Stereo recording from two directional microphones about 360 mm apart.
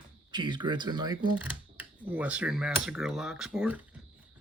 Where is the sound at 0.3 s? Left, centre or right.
Centre.